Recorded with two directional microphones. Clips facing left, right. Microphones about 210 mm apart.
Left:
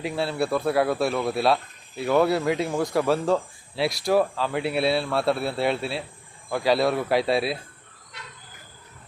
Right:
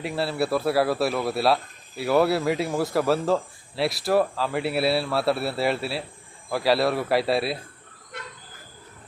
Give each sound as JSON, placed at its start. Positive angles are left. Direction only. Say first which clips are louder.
{"t": 0.0, "sound": "speech", "louder": "even", "side_deg": 0}
{"t": 8.1, "sound": "train", "louder": "right 6 dB", "side_deg": -50}